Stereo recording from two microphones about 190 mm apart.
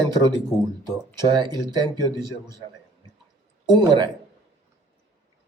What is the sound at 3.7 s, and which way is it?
Speech, 20° right (ahead or behind).